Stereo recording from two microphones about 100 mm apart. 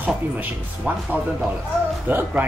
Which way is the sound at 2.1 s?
20° right (ahead or behind).